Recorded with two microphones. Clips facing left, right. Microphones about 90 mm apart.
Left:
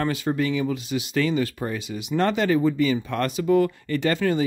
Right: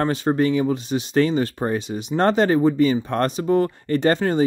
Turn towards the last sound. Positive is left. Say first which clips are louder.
# right 3 dB
turn(degrees=-35)  # may be behind; listen again after turning